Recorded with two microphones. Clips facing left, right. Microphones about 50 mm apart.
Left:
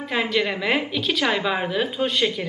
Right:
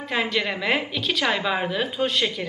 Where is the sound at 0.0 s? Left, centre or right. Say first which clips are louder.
Left 2 dB; centre.